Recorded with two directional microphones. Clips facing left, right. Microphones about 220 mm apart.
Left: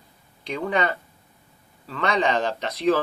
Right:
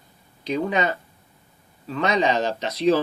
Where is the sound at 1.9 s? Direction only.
20° right (ahead or behind).